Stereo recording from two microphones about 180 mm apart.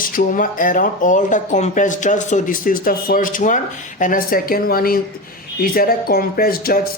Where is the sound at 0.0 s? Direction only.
50° left (ahead or behind).